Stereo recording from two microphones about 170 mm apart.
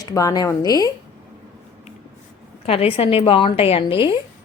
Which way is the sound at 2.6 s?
35° left (ahead or behind).